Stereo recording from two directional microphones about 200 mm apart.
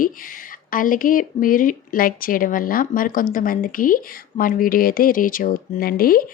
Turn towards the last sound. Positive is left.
turn(degrees=45)  # may be behind; listen again after turning